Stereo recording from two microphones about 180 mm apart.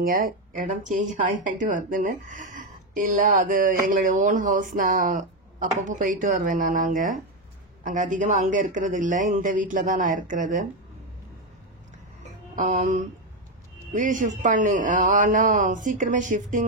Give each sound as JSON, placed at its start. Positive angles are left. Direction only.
{"t": 0.0, "sound": "speech", "side_deg": -50}
{"t": 12.5, "sound": "speech", "side_deg": -45}